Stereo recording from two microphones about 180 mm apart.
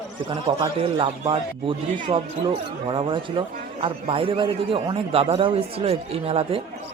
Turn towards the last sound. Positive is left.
turn(degrees=-35)  # may be behind; listen again after turning